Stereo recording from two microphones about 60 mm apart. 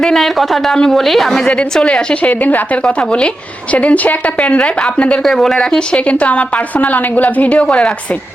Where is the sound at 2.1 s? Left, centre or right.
Left.